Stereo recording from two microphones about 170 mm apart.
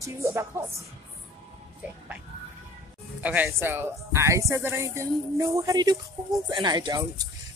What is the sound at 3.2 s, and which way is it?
Speech, 10° right (ahead or behind).